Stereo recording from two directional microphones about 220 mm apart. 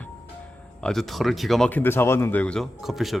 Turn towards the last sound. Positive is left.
turn(degrees=0)  # may be behind; listen again after turning